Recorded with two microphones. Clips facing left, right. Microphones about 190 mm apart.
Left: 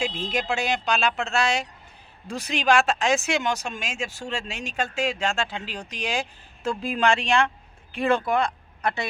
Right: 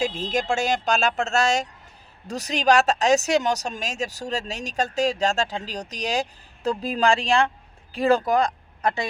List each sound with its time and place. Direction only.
0.0 s speech: 40° right (ahead or behind)